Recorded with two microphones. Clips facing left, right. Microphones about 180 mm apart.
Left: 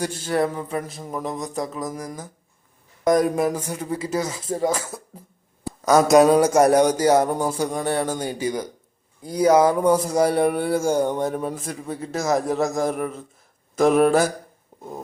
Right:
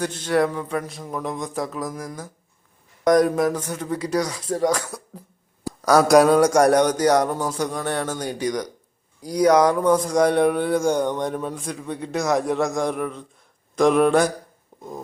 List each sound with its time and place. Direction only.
0.0 s a man's voice: 10° left (ahead or behind)
6.1 s a man's voice: 5° left (ahead or behind)